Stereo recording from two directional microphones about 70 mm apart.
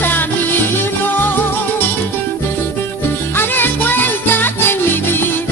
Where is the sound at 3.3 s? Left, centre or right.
Left.